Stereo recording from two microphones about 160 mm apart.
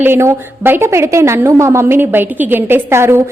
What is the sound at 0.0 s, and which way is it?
A woman's voice, 15° right (ahead or behind).